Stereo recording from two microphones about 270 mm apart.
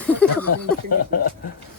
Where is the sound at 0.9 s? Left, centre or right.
Left.